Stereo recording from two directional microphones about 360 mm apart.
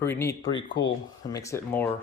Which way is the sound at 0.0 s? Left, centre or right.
Centre.